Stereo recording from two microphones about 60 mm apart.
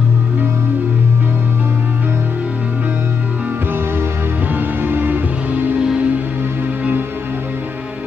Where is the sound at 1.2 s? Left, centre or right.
Right.